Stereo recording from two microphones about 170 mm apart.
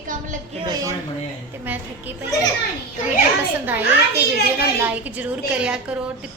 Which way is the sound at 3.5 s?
10° right (ahead or behind).